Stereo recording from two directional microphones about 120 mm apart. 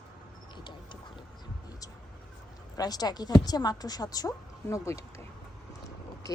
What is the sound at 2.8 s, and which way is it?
Speech, 35° left (ahead or behind).